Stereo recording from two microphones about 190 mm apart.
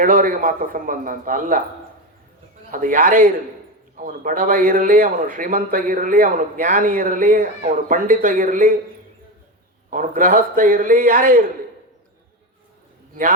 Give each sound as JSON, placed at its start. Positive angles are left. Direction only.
{"t": 0.0, "sound": "a man's voice", "side_deg": -45}
{"t": 2.7, "sound": "a man's voice", "side_deg": -45}
{"t": 9.9, "sound": "a man's voice", "side_deg": -45}